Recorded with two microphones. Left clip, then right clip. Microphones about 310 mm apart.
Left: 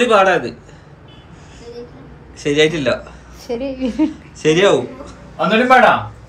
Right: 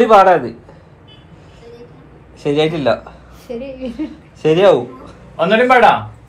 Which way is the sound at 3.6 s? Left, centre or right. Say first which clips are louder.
Left 6 dB; left.